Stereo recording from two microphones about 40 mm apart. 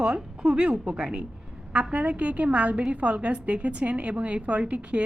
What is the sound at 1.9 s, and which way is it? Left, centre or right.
A woman's voice, right.